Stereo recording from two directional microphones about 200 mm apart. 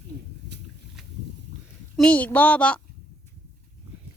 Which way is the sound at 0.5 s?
60° right (ahead or behind).